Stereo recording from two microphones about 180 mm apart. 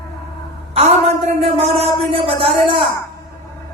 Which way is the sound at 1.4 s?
35° right (ahead or behind).